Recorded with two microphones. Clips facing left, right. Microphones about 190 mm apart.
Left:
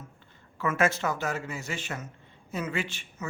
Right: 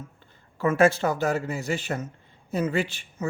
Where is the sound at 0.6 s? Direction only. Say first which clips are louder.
Right 6 dB; 35° right (ahead or behind).